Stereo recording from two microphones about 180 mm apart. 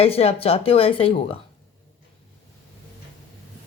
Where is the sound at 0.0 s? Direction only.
35° left (ahead or behind).